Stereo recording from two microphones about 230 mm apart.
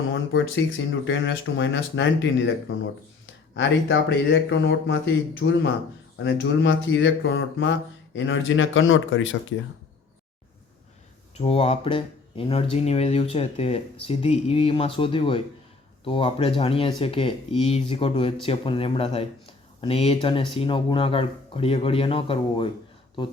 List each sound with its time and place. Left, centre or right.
0.1 s speech: left
3.5 s speech: left
11.3 s speech: left